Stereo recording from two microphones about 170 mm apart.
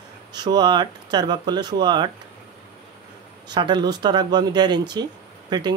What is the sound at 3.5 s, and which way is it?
Speech, 25° right (ahead or behind).